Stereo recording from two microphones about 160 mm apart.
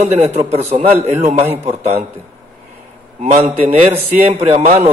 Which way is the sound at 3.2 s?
45° right (ahead or behind).